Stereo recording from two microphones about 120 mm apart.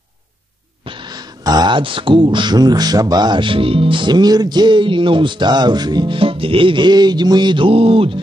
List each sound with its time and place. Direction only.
0.8 s speech: 40° right (ahead or behind)